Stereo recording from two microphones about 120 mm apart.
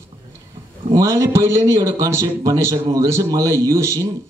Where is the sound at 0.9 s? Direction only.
25° right (ahead or behind).